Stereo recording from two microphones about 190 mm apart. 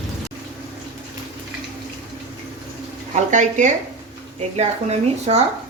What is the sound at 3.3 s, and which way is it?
Speech, 40° right (ahead or behind).